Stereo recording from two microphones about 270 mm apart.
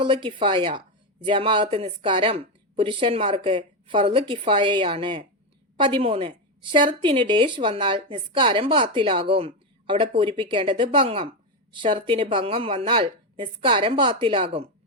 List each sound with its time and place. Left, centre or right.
0.0 s a woman's voice: centre